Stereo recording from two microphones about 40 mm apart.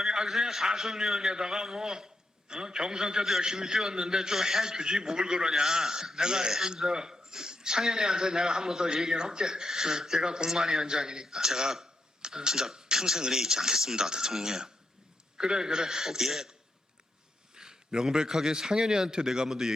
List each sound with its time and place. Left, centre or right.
0.0 s a man's voice: centre
17.5 s a sound: centre
18.3 s a man's voice: centre